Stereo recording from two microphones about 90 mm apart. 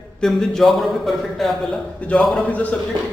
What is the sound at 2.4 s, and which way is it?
Speech, 15° left (ahead or behind).